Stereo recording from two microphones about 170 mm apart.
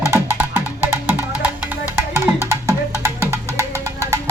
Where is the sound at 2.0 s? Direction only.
15° right (ahead or behind).